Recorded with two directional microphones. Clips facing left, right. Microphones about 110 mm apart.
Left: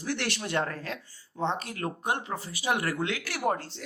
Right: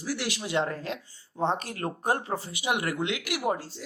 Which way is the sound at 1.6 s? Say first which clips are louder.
Right 2 dB; 30° right (ahead or behind).